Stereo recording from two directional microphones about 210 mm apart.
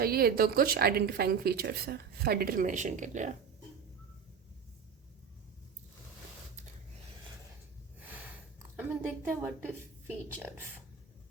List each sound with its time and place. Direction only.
0.0 s a woman's voice: 45° right (ahead or behind)
7.9 s snort: 10° right (ahead or behind)
8.7 s a woman's voice: 10° right (ahead or behind)